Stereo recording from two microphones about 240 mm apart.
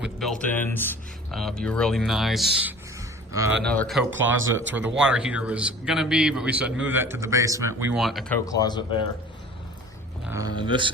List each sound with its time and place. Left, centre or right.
0.0 s a man's voice: centre
3.6 s speech: centre
8.4 s speech: centre
10.2 s a man's voice: centre